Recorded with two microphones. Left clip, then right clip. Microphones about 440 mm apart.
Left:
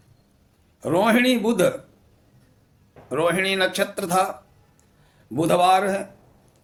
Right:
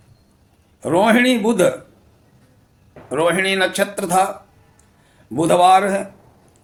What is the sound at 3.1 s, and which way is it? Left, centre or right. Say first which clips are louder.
Speech: right 4 dB; left.